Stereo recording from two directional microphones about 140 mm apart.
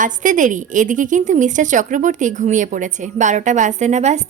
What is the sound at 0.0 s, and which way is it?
A woman's voice, 65° right (ahead or behind).